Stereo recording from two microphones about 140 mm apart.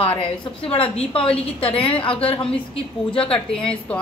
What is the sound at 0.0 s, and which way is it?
A woman's voice, 40° left (ahead or behind).